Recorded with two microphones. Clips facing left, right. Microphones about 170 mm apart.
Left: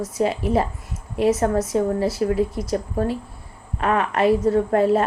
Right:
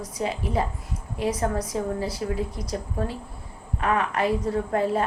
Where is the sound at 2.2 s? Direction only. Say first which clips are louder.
Left 8 dB; 65° left (ahead or behind).